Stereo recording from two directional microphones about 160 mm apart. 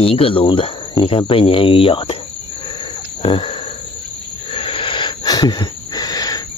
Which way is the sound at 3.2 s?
35° left (ahead or behind).